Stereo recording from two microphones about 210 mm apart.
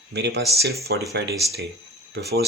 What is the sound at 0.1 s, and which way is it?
Speech, 55° right (ahead or behind).